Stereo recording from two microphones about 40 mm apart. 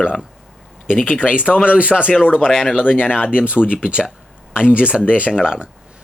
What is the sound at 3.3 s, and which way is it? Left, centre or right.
Speech, right.